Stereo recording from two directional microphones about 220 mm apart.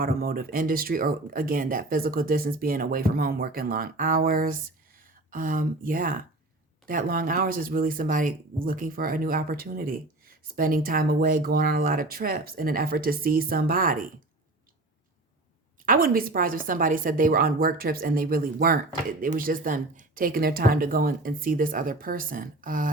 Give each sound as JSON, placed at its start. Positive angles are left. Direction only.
{"t": 0.0, "sound": "speech", "side_deg": -40}
{"t": 15.9, "sound": "speech", "side_deg": -40}